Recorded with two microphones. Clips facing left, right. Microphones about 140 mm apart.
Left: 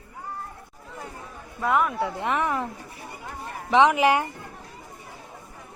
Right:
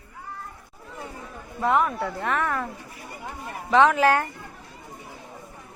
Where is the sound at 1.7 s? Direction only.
Centre (ahead or behind).